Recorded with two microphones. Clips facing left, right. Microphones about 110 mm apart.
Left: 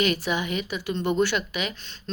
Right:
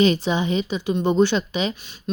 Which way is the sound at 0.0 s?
25° right (ahead or behind).